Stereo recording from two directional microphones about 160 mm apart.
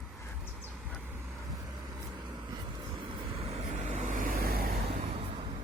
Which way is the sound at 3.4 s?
40° right (ahead or behind).